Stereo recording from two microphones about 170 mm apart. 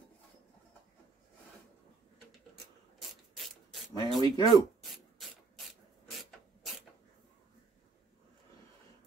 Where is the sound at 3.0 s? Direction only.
Centre (ahead or behind).